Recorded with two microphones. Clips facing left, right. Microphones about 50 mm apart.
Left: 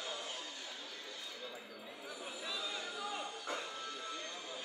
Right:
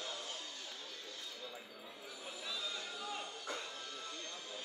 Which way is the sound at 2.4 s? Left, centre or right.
Centre.